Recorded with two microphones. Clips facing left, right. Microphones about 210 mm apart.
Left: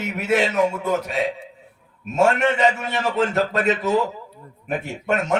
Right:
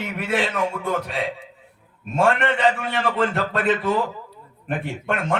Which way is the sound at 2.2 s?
45° left (ahead or behind).